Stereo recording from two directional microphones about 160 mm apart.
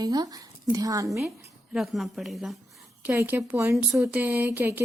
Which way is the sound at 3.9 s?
5° right (ahead or behind).